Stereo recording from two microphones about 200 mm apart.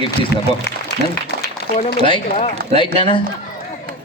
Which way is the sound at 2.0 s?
25° left (ahead or behind).